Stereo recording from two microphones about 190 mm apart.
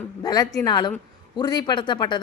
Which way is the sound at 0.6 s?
20° left (ahead or behind).